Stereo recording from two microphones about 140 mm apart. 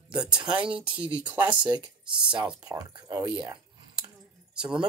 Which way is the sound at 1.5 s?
30° right (ahead or behind).